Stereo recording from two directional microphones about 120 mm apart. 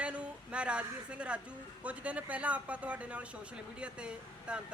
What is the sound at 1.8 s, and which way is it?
Speech, 10° right (ahead or behind).